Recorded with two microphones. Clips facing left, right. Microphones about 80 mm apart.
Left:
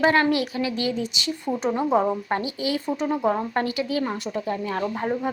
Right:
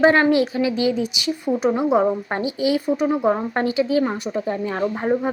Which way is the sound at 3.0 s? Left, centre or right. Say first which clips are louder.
Right 5 dB; centre.